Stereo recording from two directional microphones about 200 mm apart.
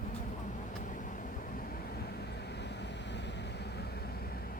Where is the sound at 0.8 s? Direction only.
40° left (ahead or behind).